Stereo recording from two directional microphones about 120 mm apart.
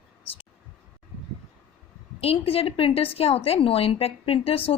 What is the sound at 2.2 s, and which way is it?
Speech, 55° left (ahead or behind).